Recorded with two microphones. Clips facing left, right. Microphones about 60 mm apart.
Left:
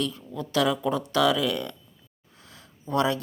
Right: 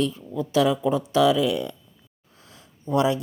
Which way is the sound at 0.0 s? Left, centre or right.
Right.